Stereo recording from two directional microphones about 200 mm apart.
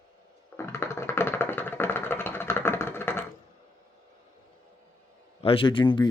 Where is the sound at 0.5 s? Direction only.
10° left (ahead or behind).